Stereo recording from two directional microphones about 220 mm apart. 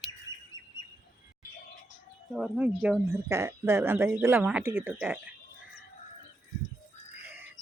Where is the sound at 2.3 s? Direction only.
5° right (ahead or behind).